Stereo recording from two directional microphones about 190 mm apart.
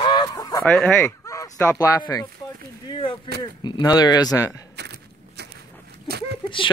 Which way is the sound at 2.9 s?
25° left (ahead or behind).